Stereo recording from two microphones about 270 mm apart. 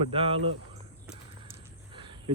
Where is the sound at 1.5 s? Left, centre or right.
Centre.